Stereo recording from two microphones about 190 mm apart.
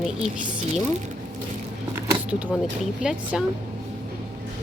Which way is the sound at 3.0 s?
5° right (ahead or behind).